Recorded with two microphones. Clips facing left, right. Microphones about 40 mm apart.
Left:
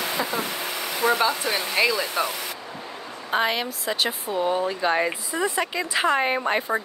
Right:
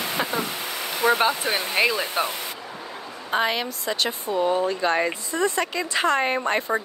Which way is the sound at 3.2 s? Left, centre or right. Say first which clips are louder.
Even; centre.